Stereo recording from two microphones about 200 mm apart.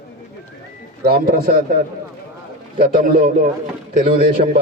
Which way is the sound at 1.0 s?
50° right (ahead or behind).